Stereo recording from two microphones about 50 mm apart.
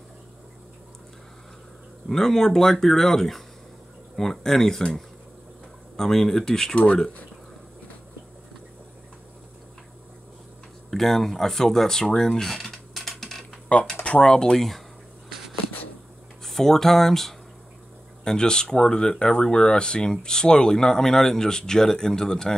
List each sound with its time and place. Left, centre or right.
2.0 s speech: centre
5.9 s speech: centre
10.9 s speech: centre
13.7 s speech: left
14.3 s speech: centre
16.4 s speech: centre